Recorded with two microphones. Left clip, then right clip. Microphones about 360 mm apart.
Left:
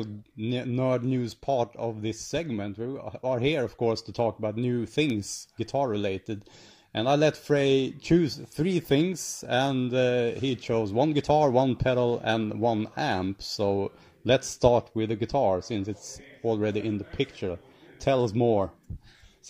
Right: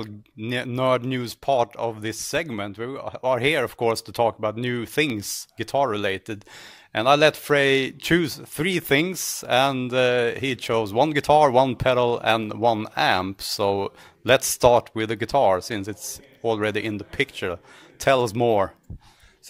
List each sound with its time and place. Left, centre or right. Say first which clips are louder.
0.0 s speech: right 1 dB; right